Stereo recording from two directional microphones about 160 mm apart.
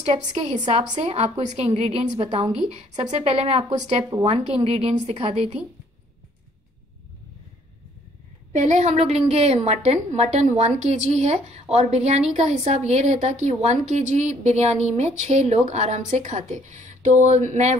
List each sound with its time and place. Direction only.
0.0 s a woman's voice: 45° right (ahead or behind)
8.5 s a woman's voice: 45° right (ahead or behind)